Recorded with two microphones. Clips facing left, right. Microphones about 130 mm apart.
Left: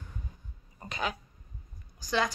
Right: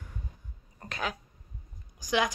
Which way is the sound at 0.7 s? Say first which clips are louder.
Left 1 dB; centre (ahead or behind).